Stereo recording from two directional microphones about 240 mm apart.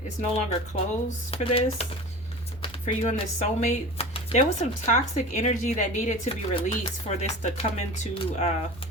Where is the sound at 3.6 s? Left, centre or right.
Left.